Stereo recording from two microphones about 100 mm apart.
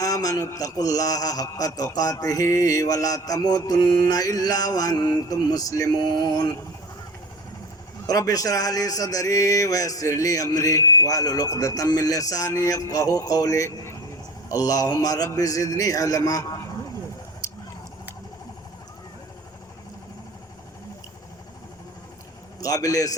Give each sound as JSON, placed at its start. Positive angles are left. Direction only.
{"t": 0.0, "sound": "a man's voice", "side_deg": 35}
{"t": 8.0, "sound": "a man's voice", "side_deg": 35}
{"t": 22.6, "sound": "a man's voice", "side_deg": 35}